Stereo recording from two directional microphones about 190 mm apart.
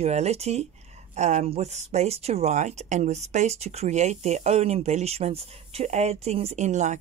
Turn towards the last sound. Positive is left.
turn(degrees=-40)  # may be behind; listen again after turning